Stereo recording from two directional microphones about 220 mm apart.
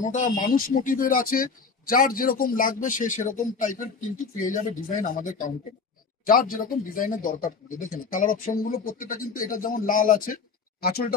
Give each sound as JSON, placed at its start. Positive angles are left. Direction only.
{"t": 0.0, "sound": "speech", "side_deg": 35}